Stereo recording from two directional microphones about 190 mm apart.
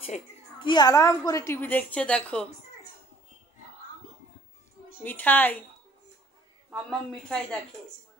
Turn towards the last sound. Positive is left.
turn(degrees=5)  # may be behind; listen again after turning